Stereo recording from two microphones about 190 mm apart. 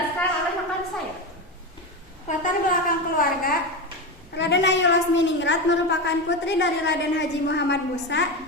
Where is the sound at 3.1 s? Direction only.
50° left (ahead or behind).